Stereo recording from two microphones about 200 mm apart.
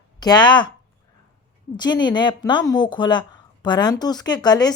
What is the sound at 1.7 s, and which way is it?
A woman's voice, 20° left (ahead or behind).